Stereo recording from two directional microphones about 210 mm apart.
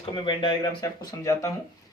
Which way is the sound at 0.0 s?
25° left (ahead or behind).